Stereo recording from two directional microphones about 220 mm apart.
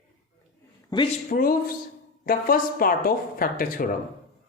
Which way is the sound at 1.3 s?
40° left (ahead or behind).